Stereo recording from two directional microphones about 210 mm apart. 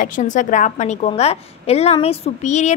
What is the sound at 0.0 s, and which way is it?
A woman's voice, 40° left (ahead or behind).